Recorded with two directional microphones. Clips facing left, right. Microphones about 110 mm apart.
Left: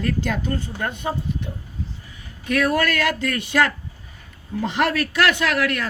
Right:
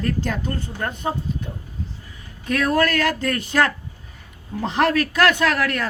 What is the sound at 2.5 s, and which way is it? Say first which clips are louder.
Speech: right 1 dB; 40° right (ahead or behind).